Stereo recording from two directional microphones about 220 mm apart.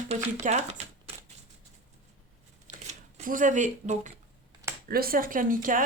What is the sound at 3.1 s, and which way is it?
Speech, 35° right (ahead or behind).